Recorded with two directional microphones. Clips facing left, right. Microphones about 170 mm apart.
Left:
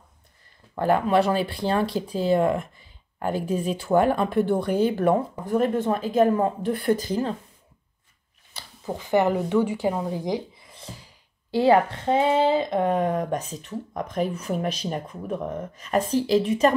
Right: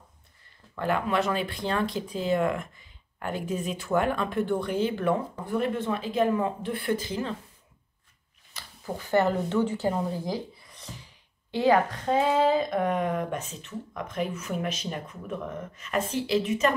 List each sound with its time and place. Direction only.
0.7 s speech: 35° left (ahead or behind)
8.5 s speech: 20° left (ahead or behind)
10.7 s a sound: 30° left (ahead or behind)
11.5 s speech: 30° left (ahead or behind)